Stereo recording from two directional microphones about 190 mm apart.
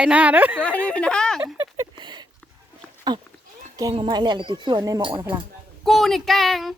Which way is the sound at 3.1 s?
25° right (ahead or behind).